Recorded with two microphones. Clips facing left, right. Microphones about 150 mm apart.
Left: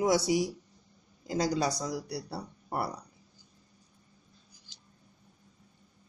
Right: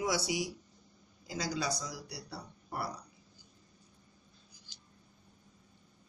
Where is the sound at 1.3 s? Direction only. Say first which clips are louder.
Left 7 dB; 50° left (ahead or behind).